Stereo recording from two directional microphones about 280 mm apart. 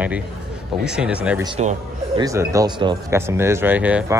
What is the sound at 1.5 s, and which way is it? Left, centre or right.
Speech, centre.